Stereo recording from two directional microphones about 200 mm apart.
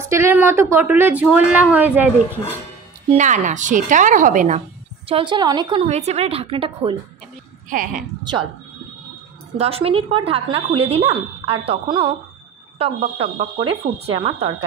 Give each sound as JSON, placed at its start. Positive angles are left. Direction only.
{"t": 0.1, "sound": "a woman's voice", "side_deg": -10}
{"t": 3.1, "sound": "speech", "side_deg": -35}
{"t": 5.0, "sound": "speech", "side_deg": -25}
{"t": 7.7, "sound": "speech", "side_deg": -45}
{"t": 8.2, "sound": "speech", "side_deg": -20}
{"t": 9.6, "sound": "speech", "side_deg": -30}